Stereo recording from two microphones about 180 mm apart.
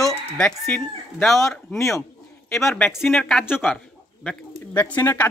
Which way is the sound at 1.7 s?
15° left (ahead or behind).